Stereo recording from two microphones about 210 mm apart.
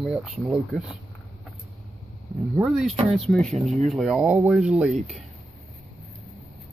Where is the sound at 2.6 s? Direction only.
Centre (ahead or behind).